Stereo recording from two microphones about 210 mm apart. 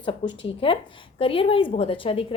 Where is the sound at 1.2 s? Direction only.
25° left (ahead or behind).